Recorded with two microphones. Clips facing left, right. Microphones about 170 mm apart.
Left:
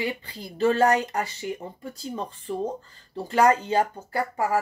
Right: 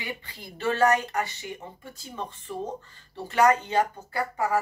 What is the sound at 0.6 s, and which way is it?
Speech, 30° left (ahead or behind).